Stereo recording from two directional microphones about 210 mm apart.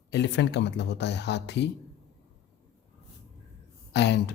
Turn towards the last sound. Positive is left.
turn(degrees=55)  # may be behind; listen again after turning